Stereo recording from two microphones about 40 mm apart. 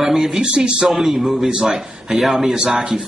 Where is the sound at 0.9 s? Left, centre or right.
Centre.